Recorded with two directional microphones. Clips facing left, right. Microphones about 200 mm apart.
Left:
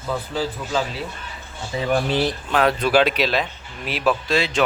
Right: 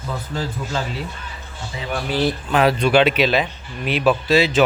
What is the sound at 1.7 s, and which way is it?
Speech, 30° left (ahead or behind).